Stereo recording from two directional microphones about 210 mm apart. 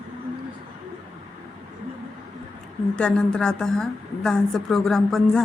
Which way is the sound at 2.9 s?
5° left (ahead or behind).